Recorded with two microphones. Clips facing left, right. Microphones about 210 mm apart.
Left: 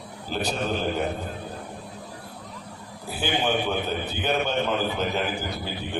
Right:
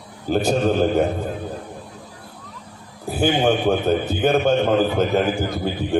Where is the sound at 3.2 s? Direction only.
45° right (ahead or behind).